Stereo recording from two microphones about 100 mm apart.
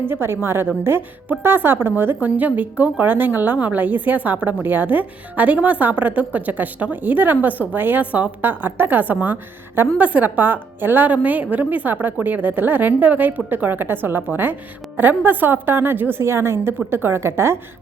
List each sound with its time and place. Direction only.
0.0 s a woman's voice: 25° right (ahead or behind)